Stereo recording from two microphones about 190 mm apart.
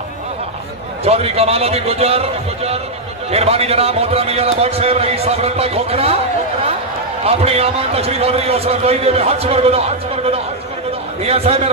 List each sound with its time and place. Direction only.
1.0 s a man's voice: 30° right (ahead or behind)